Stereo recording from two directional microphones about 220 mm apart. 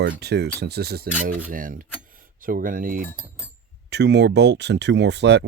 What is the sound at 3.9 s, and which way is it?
Cutlery, 50° right (ahead or behind).